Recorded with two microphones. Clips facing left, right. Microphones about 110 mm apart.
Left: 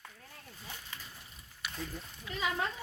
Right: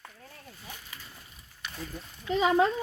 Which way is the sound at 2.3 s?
90° right.